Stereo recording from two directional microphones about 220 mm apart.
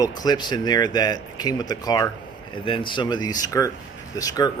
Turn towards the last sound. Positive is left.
turn(degrees=15)  # may be behind; listen again after turning